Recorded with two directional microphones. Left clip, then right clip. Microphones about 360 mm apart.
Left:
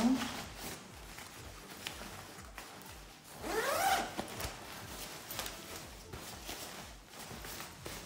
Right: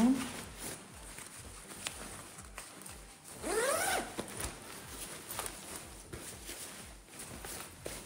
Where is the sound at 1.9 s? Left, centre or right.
Centre.